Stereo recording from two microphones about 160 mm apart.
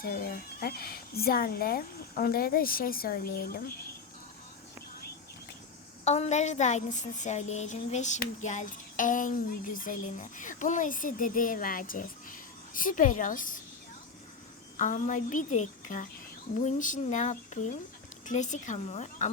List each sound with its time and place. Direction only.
0.0 s speech: 65° left (ahead or behind)
6.1 s a woman's voice: 45° left (ahead or behind)
14.8 s a woman's voice: 50° left (ahead or behind)